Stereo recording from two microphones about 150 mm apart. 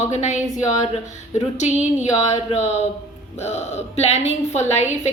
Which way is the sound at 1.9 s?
50° left (ahead or behind).